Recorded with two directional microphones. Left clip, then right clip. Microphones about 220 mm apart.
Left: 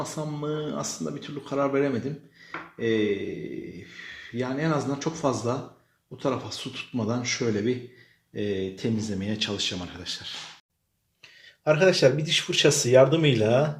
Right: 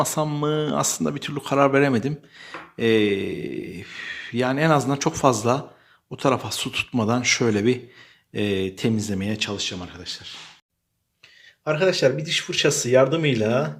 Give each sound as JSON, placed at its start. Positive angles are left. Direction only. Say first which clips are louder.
{"t": 0.0, "sound": "speech", "louder": "right 9 dB", "side_deg": -35}
{"t": 11.6, "sound": "speech", "louder": "even", "side_deg": -5}